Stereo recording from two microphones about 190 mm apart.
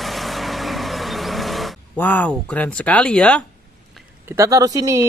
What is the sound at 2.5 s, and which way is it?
Speech, 5° left (ahead or behind).